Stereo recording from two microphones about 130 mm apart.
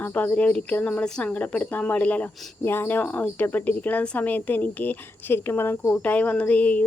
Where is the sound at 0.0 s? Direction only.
15° left (ahead or behind).